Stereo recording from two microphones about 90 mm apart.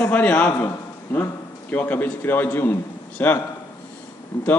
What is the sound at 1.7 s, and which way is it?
A man's voice, 20° left (ahead or behind).